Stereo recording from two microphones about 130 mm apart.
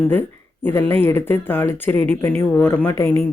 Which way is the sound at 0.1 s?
15° left (ahead or behind).